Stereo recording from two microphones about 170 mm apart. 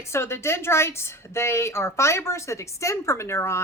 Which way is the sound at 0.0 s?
15° left (ahead or behind).